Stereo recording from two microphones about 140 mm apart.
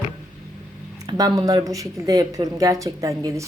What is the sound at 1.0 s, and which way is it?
Speech, 25° right (ahead or behind).